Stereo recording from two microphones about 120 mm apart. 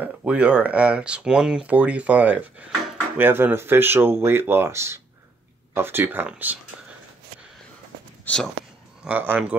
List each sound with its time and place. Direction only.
0.0 s speech: 10° right (ahead or behind)
8.3 s speech: 15° left (ahead or behind)
9.0 s speech: 15° right (ahead or behind)